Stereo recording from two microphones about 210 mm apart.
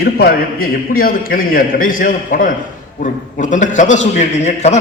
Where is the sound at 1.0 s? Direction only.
45° left (ahead or behind).